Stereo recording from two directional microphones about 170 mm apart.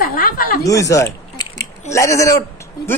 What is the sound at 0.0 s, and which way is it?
Chuckle, 55° left (ahead or behind).